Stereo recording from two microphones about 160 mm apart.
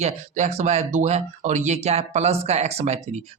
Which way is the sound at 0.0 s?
45° right (ahead or behind).